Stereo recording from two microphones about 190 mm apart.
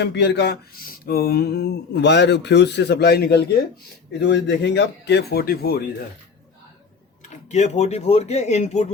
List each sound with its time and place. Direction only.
0.0 s speech: 65° left (ahead or behind)
7.5 s speech: 35° left (ahead or behind)